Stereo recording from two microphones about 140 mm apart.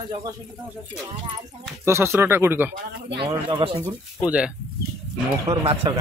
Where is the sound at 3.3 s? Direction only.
35° right (ahead or behind).